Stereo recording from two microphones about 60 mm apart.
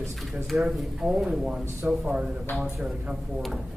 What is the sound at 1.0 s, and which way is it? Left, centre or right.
Speech, centre.